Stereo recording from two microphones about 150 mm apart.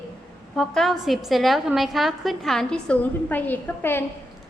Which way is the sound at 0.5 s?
5° left (ahead or behind).